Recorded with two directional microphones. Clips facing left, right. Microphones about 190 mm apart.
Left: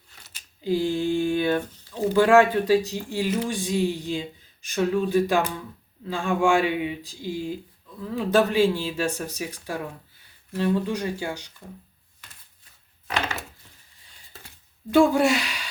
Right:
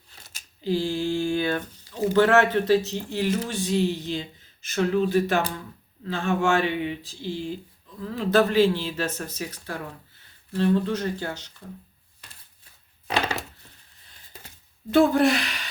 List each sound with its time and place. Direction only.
0.6 s a sound: 15° left (ahead or behind)
2.1 s speech: 10° left (ahead or behind)
15.0 s speech: 10° left (ahead or behind)